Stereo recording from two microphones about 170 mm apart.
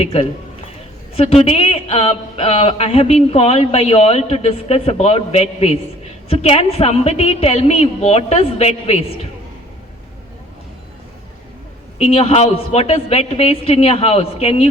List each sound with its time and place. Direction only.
0.0 s speech: 35° left (ahead or behind)
11.9 s speech: 35° left (ahead or behind)